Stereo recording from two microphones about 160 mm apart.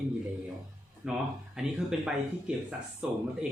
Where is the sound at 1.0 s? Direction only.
5° right (ahead or behind).